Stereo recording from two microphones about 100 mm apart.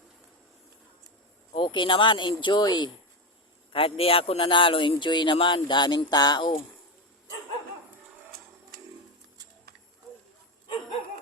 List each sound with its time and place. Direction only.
1.5 s speech: 55° left (ahead or behind)
3.7 s a man's voice: 65° left (ahead or behind); by 6.5 s 45° left (ahead or behind)